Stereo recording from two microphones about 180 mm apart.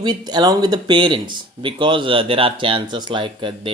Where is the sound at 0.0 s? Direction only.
25° right (ahead or behind).